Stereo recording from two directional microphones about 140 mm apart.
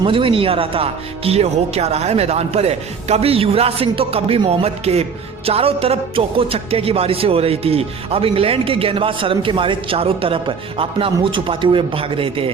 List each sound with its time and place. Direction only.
0.0 s a man's voice: 40° right (ahead or behind)